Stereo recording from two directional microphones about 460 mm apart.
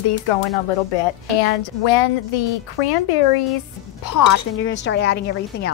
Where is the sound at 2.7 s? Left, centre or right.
Left.